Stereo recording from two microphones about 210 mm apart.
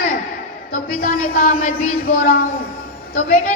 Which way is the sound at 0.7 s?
45° left (ahead or behind).